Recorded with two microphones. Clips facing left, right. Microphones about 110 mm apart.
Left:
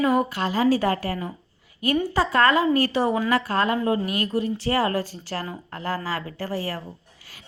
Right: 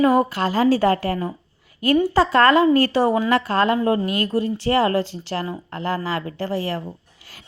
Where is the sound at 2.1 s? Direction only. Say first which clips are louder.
Right 3 dB; 30° right (ahead or behind).